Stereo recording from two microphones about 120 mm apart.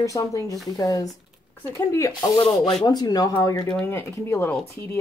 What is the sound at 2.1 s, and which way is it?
Speech, 40° left (ahead or behind).